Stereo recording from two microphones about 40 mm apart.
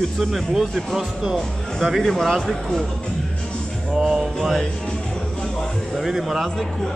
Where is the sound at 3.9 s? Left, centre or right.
Centre.